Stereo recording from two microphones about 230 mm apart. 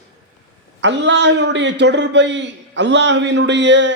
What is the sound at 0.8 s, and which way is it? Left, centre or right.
A man's voice, right.